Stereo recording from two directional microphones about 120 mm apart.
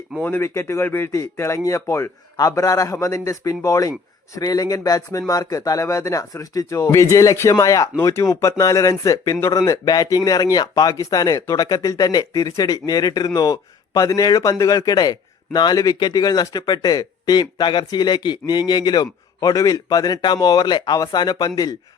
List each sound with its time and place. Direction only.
0.2 s speech: 15° left (ahead or behind)